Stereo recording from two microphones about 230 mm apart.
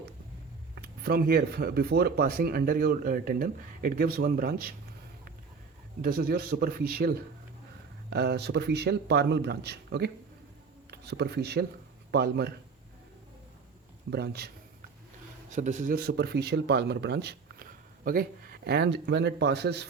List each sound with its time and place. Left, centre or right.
0.8 s speech: right
6.0 s a man's voice: right
14.1 s a man's voice: right
15.4 s speech: right